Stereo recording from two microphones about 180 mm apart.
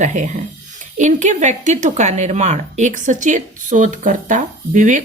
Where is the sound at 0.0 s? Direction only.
40° right (ahead or behind).